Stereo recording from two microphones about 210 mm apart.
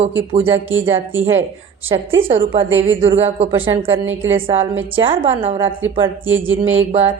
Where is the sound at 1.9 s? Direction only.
20° right (ahead or behind).